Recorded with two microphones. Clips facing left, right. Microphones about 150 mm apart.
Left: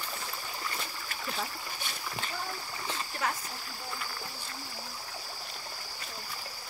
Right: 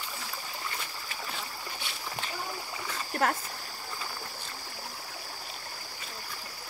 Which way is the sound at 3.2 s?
55° right (ahead or behind).